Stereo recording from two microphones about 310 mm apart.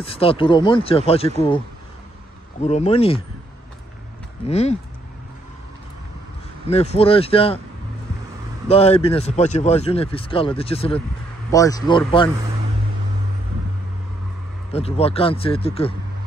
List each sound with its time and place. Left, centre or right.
0.0 s speech: centre
2.6 s speech: left
4.5 s speech: left
6.7 s speech: centre
8.6 s speech: centre
14.7 s speech: centre